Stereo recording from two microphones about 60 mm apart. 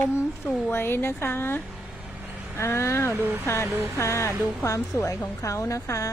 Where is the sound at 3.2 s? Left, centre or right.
Right.